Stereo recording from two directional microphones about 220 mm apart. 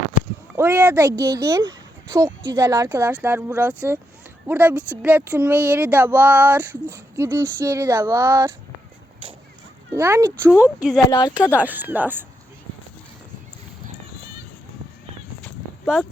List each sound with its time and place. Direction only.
0.5 s speech: 10° right (ahead or behind)
10.0 s speech: 10° right (ahead or behind)
11.1 s speech: 15° left (ahead or behind)
11.5 s speech: 5° right (ahead or behind)